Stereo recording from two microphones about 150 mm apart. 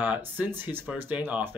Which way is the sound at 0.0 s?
10° right (ahead or behind).